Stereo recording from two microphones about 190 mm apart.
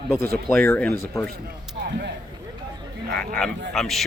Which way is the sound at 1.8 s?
60° right (ahead or behind).